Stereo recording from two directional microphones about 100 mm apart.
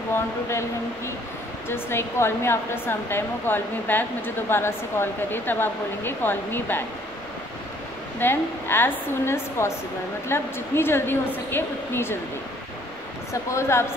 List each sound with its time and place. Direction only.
0.1 s a woman's voice: 25° left (ahead or behind)
8.2 s a woman's voice: 20° left (ahead or behind)
13.3 s a woman's voice: 30° left (ahead or behind)